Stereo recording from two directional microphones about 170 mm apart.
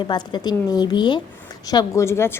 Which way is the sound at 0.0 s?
25° left (ahead or behind).